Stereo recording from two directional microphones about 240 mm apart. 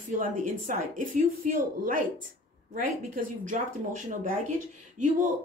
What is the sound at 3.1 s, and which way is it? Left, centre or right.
Speech, right.